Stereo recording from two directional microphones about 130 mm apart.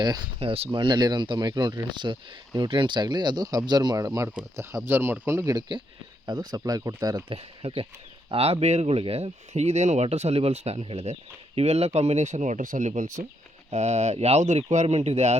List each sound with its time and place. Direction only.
0.0 s speech: 35° right (ahead or behind)
0.3 s speech: 50° right (ahead or behind)
0.7 s speech: 35° right (ahead or behind)
7.3 s speech: 45° right (ahead or behind); by 13.2 s 70° right (ahead or behind)
13.7 s speech: 60° right (ahead or behind)